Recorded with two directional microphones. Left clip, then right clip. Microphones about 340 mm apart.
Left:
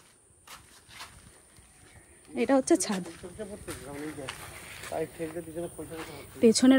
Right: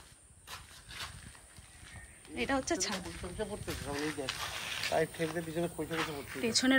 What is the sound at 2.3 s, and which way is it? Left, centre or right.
Speech, centre.